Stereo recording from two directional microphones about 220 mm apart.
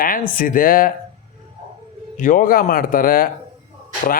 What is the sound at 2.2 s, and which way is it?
Speech, 40° left (ahead or behind).